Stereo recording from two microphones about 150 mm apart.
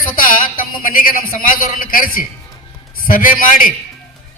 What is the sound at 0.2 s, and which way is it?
A man's voice, 70° left (ahead or behind).